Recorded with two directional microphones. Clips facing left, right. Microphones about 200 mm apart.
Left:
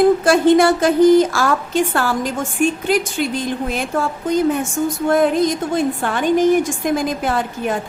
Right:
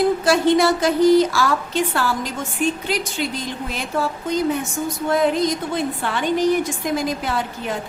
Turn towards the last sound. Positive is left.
turn(degrees=50)  # may be behind; listen again after turning